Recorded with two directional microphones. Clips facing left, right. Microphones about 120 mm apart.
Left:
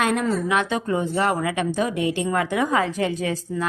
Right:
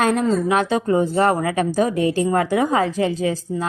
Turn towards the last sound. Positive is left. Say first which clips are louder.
# right 3 dB
turn(degrees=-30)  # may be behind; listen again after turning